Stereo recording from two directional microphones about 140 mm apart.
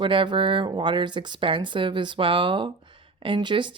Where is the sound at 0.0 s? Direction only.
35° right (ahead or behind).